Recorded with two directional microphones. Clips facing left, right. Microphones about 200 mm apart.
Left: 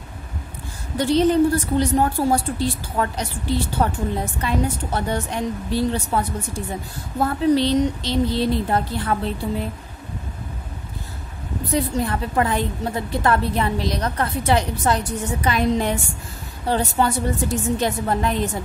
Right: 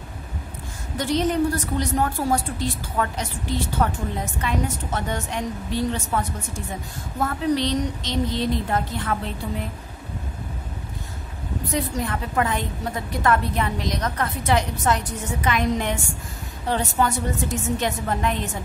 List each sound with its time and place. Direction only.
0.9 s a woman's voice: 30° left (ahead or behind)
11.7 s a woman's voice: 35° left (ahead or behind)